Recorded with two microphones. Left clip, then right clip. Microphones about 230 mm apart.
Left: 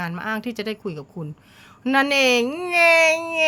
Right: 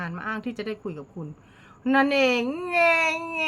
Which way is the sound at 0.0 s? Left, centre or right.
Left.